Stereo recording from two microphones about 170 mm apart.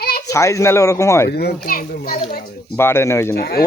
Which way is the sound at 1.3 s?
70° left (ahead or behind).